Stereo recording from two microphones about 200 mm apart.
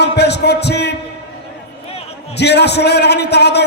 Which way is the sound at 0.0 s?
55° left (ahead or behind).